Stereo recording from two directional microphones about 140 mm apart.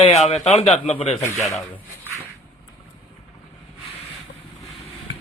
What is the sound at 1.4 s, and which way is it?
Speech, centre (ahead or behind).